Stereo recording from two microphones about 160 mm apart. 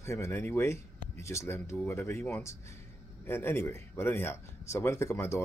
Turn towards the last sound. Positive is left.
turn(degrees=15)  # may be behind; listen again after turning